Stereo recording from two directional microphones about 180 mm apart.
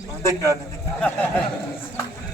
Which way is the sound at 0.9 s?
10° left (ahead or behind).